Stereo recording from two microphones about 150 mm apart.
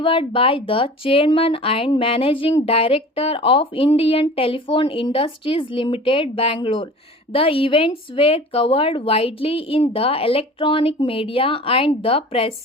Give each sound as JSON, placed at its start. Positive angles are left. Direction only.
{"t": 0.0, "sound": "speech", "side_deg": 35}